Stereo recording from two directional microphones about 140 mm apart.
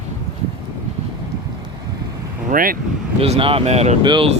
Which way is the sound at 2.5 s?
90° right.